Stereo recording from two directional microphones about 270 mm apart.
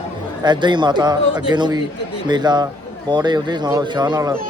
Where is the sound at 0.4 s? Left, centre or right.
Centre.